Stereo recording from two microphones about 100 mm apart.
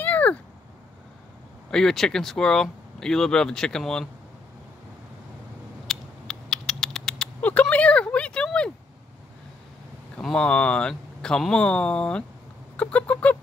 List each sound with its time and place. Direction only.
0.0 s a sound: 15° left (ahead or behind)
1.7 s speech: 5° left (ahead or behind)
5.9 s rodents: 5° left (ahead or behind)
7.7 s a sound: 10° left (ahead or behind)
10.2 s speech: 10° left (ahead or behind)
12.7 s goose: 15° left (ahead or behind)